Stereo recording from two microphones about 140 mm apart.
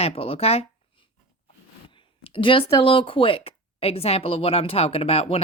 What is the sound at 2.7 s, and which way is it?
Speech, 40° left (ahead or behind).